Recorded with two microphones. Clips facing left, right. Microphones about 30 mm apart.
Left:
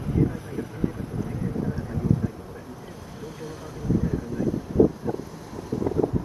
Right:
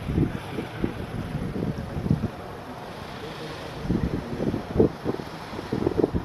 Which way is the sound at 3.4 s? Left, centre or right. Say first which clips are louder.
Left 2 dB; right.